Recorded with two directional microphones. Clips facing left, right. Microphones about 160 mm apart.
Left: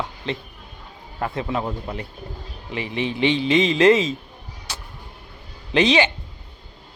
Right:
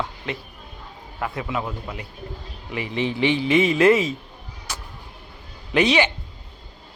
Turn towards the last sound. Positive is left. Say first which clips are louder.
# left 1 dB
turn(degrees=25)  # may be behind; listen again after turning